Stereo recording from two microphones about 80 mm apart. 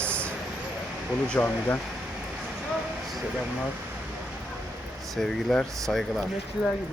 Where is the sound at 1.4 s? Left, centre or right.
Left.